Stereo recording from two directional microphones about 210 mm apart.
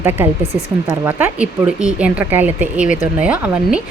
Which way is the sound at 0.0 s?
10° right (ahead or behind).